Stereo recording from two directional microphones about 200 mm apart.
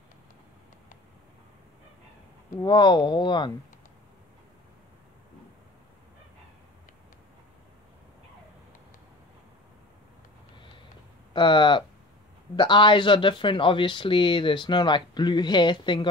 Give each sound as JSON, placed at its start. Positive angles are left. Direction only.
{"t": 2.5, "sound": "speech", "side_deg": 20}
{"t": 11.3, "sound": "speech", "side_deg": 25}